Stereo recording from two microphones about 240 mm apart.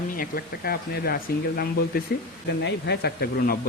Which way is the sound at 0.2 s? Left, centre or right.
Left.